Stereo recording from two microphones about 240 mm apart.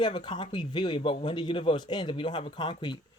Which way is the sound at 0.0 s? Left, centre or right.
Centre.